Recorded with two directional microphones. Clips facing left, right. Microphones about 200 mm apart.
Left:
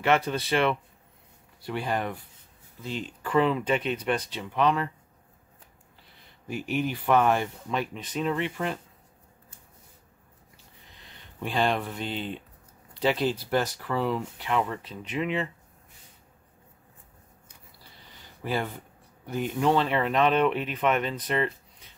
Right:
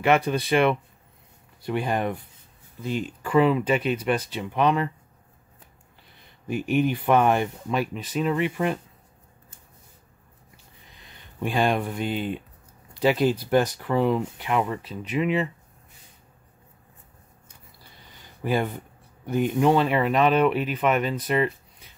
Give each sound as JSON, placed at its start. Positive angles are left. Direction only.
{"t": 0.0, "sound": "speech", "side_deg": -15}
{"t": 6.7, "sound": "speech", "side_deg": -15}
{"t": 7.7, "sound": "speech", "side_deg": -5}
{"t": 11.0, "sound": "speech", "side_deg": -15}
{"t": 18.4, "sound": "speech", "side_deg": -15}